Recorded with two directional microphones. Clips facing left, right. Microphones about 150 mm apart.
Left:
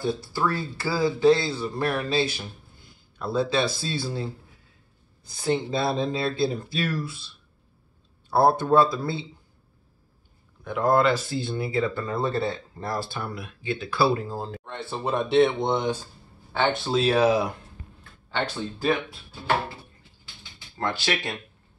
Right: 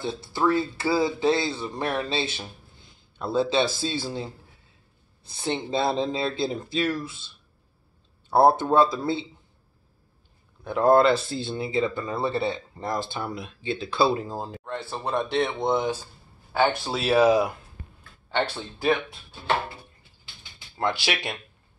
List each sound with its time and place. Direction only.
0.0 s a man's voice: 25° right (ahead or behind)
8.3 s a man's voice: 25° right (ahead or behind)
10.6 s a man's voice: 30° right (ahead or behind)
14.7 s speech: centre (ahead or behind)
20.8 s speech: 15° right (ahead or behind)